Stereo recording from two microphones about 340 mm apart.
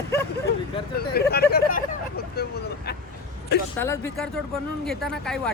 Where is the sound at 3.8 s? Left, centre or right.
Centre.